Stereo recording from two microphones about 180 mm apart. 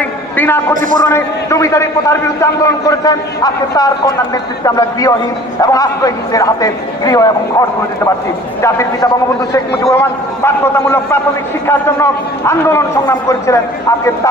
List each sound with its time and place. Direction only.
0.4 s a man's voice: 10° left (ahead or behind)
8.6 s a man's voice: 15° left (ahead or behind)